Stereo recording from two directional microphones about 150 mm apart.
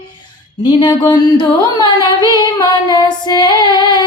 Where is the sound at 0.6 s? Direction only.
30° left (ahead or behind).